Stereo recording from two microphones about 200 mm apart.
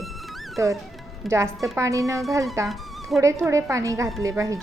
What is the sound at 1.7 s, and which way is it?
A woman's voice, 15° right (ahead or behind).